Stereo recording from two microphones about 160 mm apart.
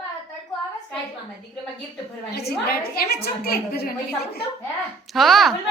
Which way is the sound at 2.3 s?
75° left (ahead or behind).